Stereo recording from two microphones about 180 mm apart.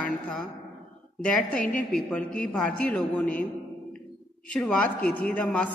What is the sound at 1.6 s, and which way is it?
Speech, 45° left (ahead or behind).